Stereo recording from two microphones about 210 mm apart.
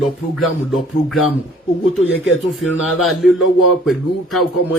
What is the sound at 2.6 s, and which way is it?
Speech, centre (ahead or behind).